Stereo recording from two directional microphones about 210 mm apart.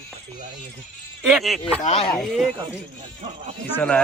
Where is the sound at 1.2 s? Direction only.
Centre (ahead or behind).